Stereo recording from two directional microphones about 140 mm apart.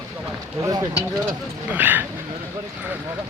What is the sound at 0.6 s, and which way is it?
Speech, 25° right (ahead or behind).